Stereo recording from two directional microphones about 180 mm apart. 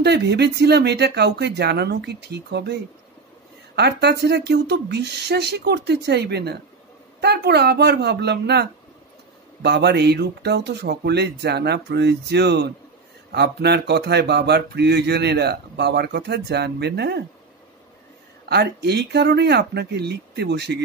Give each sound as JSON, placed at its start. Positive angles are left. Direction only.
{"t": 0.0, "sound": "speech", "side_deg": -65}
{"t": 18.4, "sound": "speech", "side_deg": -65}